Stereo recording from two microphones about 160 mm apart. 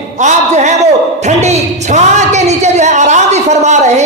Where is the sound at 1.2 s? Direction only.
45° right (ahead or behind).